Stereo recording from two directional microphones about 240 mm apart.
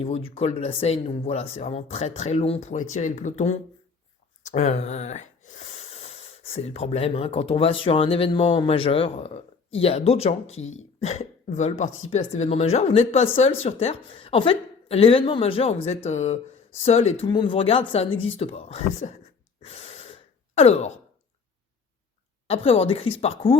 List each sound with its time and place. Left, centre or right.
0.0 s speech: left
10.6 s speech: left
11.0 s speech: left
19.6 s gasp: left
20.6 s speech: left
22.4 s speech: left